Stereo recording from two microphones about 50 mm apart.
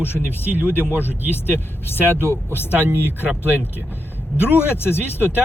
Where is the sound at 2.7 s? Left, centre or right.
Right.